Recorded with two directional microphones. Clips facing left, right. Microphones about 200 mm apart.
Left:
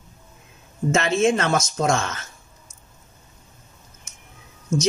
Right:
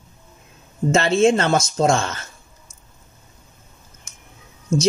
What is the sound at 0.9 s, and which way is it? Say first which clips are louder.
A woman's voice: right 4 dB; 30° right (ahead or behind).